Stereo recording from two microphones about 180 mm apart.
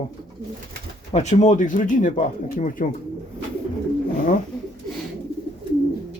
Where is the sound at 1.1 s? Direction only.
40° left (ahead or behind).